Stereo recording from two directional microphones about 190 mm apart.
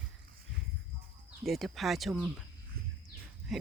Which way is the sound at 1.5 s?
Centre (ahead or behind).